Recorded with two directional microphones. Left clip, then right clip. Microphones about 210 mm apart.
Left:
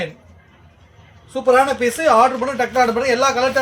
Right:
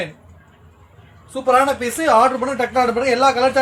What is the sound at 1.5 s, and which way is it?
Speech, 25° left (ahead or behind).